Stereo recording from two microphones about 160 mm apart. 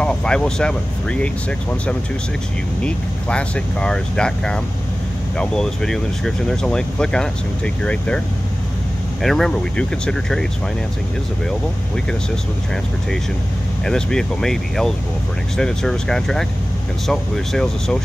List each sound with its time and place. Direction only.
0.0 s speech: 5° left (ahead or behind)
9.2 s speech: centre (ahead or behind)
13.8 s speech: 5° left (ahead or behind)